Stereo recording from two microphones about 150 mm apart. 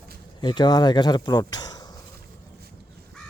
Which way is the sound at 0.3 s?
30° left (ahead or behind).